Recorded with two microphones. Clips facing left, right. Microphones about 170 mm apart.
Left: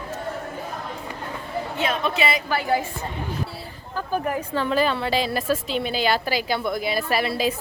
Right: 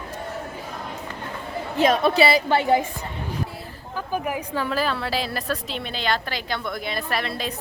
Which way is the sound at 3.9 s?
10° right (ahead or behind).